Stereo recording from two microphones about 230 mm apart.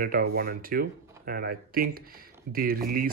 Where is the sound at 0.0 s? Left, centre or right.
Right.